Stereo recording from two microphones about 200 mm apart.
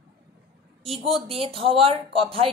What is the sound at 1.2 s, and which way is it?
A woman's voice, 30° right (ahead or behind).